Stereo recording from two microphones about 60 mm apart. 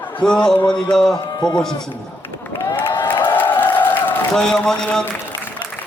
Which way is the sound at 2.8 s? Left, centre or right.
Left.